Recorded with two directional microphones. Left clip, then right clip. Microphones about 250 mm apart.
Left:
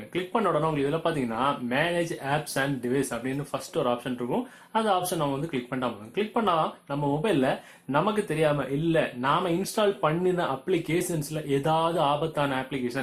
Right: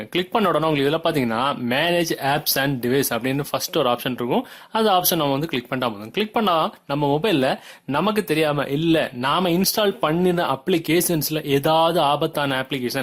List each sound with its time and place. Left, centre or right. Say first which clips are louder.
0.1 s speech: right 6 dB; right